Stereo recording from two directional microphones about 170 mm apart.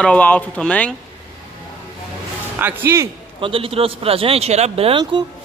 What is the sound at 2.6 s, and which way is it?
Speech, 15° right (ahead or behind).